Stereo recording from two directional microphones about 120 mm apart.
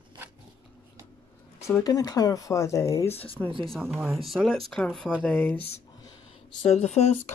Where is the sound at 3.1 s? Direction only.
55° left (ahead or behind).